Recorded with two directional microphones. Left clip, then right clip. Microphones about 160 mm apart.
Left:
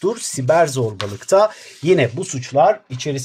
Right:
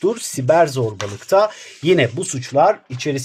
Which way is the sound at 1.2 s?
15° left (ahead or behind).